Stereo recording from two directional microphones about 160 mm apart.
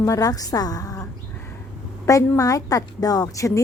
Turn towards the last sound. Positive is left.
turn(degrees=20)  # may be behind; listen again after turning